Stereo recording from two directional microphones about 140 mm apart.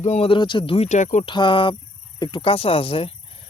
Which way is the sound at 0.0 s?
45° left (ahead or behind).